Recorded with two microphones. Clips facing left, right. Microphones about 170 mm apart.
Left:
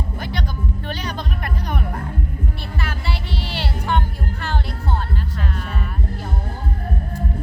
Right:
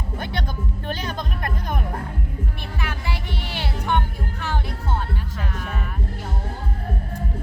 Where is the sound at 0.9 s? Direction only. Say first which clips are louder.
Right 2 dB; 45° right (ahead or behind).